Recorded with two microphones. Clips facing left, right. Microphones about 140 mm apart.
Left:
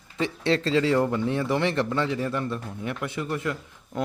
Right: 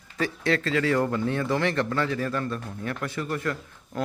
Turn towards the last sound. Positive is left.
turn(degrees=20)  # may be behind; listen again after turning